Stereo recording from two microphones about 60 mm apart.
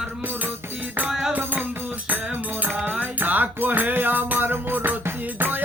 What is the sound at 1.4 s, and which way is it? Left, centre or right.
Music, right.